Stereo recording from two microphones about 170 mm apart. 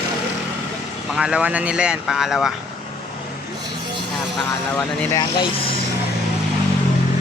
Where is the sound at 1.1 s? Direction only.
5° right (ahead or behind).